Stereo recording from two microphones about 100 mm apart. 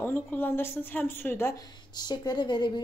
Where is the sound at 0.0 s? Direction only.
20° left (ahead or behind).